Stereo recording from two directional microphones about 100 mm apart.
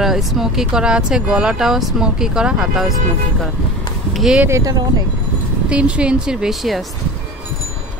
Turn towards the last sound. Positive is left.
turn(degrees=0)  # may be behind; listen again after turning